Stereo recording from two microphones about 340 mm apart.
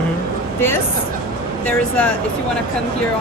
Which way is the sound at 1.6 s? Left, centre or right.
Centre.